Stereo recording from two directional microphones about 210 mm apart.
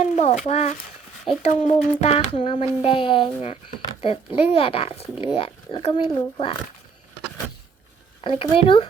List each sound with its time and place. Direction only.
0.0 s a sound: 30° left (ahead or behind)
0.4 s speech: 30° left (ahead or behind)
8.4 s speech: 25° left (ahead or behind)